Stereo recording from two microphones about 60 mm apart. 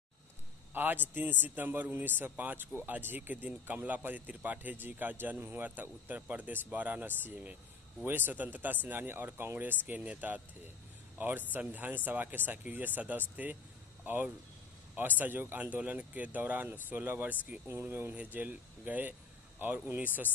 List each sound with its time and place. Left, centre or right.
0.7 s speech: right
15.0 s speech: right
17.6 s speech: right
18.1 s speech: right